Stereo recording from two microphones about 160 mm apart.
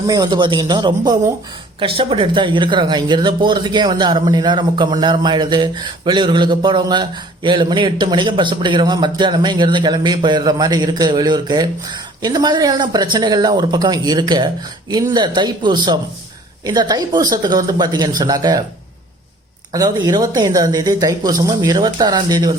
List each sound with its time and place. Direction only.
0.1 s speech: 25° right (ahead or behind)
19.7 s speech: 25° right (ahead or behind)